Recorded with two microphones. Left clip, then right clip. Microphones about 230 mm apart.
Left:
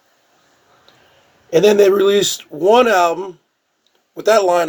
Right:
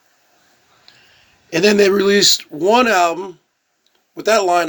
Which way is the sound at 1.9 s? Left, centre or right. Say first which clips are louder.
Right 1 dB; right.